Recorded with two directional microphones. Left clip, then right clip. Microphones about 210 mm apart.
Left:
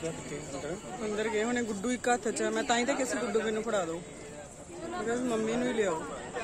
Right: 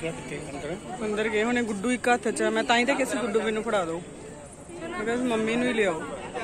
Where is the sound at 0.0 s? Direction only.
20° left (ahead or behind).